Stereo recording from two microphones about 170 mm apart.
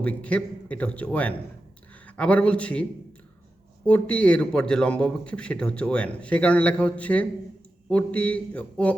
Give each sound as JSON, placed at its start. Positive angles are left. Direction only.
{"t": 0.0, "sound": "a man's voice", "side_deg": 10}
{"t": 3.8, "sound": "a man's voice", "side_deg": 10}